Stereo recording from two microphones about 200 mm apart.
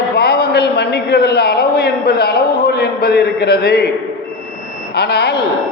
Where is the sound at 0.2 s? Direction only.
50° left (ahead or behind).